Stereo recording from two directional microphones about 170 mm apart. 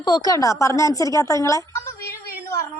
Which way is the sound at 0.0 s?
25° left (ahead or behind).